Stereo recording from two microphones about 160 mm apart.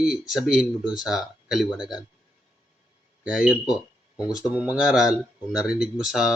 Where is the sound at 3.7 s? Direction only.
25° left (ahead or behind).